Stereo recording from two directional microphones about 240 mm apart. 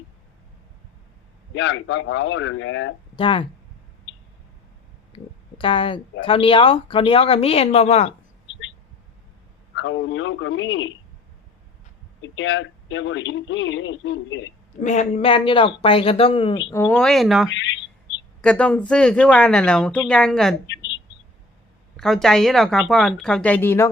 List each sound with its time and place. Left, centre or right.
1.5 s speech: left
3.2 s speech: left
5.1 s speech: left
9.7 s speech: left
12.2 s speech: left
14.8 s speech: left
16.8 s speech: centre
17.5 s speech: left
18.4 s speech: centre
20.7 s a sound: left
21.9 s speech: centre